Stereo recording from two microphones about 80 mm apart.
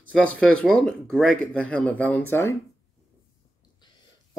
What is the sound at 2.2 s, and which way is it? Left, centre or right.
Speech, left.